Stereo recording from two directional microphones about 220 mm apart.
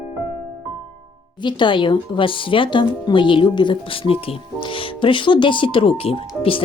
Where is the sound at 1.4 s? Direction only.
20° left (ahead or behind).